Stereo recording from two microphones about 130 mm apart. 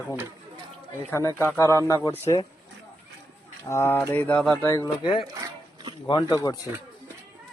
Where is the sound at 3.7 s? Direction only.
20° left (ahead or behind).